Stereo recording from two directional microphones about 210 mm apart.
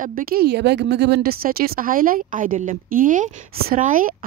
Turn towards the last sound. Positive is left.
turn(degrees=-40)  # may be behind; listen again after turning